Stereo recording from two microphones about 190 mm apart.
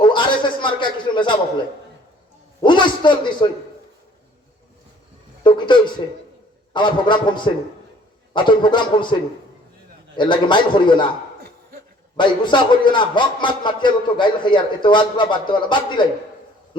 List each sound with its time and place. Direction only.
0.0 s a man's voice: 25° left (ahead or behind)
2.6 s a sound: 25° left (ahead or behind)
5.4 s a sound: 25° left (ahead or behind)
6.7 s a man's voice: 25° left (ahead or behind)
10.2 s a man's voice: 25° left (ahead or behind)
12.1 s a man's voice: 25° left (ahead or behind)